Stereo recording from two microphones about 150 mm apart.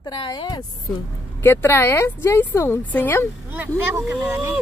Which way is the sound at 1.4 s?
15° left (ahead or behind).